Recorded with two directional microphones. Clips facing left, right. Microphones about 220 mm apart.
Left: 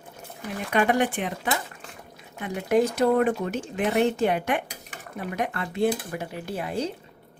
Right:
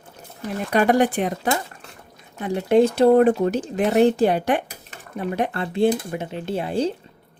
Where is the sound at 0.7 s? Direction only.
40° right (ahead or behind).